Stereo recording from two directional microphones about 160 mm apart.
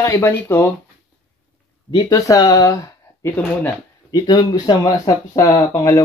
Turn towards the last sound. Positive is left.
turn(degrees=20)  # may be behind; listen again after turning